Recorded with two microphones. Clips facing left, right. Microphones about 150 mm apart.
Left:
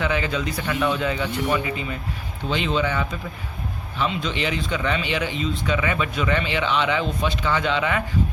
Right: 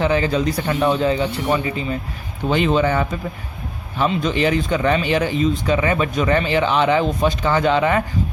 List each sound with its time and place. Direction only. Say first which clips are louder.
0.0 s speech: right 6 dB; 35° right (ahead or behind)
2.5 s a man's voice: right 6 dB; 50° right (ahead or behind)